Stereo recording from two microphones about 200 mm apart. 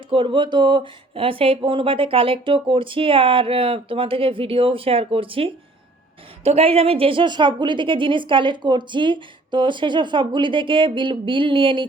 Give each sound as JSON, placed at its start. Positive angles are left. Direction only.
{"t": 0.1, "sound": "a woman's voice", "side_deg": -25}